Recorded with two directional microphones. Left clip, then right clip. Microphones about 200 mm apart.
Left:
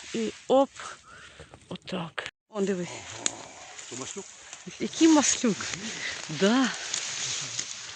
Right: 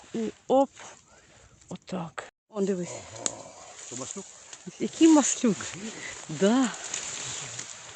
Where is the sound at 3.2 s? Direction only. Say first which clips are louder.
Left 2 dB; 60° right (ahead or behind).